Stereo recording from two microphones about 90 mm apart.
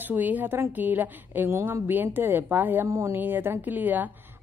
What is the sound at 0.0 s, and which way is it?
Speech, 20° right (ahead or behind).